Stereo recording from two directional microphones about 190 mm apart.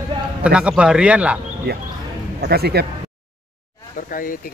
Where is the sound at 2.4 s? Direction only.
60° right (ahead or behind).